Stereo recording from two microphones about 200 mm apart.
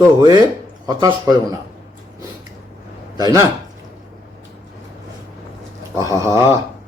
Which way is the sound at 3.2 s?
20° right (ahead or behind).